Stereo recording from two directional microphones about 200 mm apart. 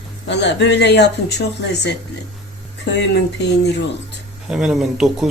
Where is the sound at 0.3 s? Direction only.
60° left (ahead or behind).